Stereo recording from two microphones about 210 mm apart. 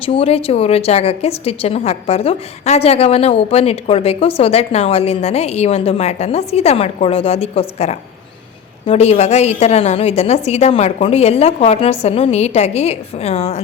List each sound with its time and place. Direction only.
0.0 s a woman's voice: 25° left (ahead or behind)